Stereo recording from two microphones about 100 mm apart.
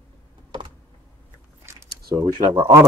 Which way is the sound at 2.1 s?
55° right (ahead or behind).